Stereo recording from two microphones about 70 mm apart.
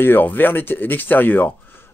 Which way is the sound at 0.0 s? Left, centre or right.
Left.